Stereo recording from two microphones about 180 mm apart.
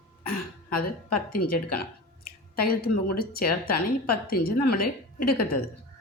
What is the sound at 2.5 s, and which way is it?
Speech, 55° left (ahead or behind).